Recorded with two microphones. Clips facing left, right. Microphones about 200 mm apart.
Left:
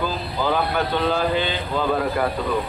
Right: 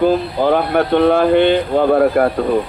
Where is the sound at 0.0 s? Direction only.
60° right (ahead or behind).